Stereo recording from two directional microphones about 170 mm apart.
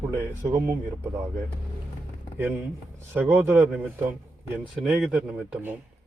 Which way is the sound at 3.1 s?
10° right (ahead or behind).